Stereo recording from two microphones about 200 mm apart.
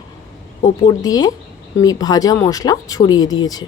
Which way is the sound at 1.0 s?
20° left (ahead or behind).